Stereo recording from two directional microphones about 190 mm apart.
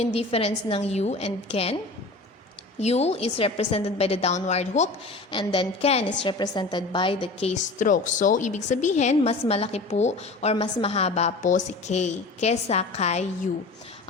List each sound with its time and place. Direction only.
0.0 s a woman's voice: 35° left (ahead or behind)
5.3 s a woman's voice: 25° left (ahead or behind)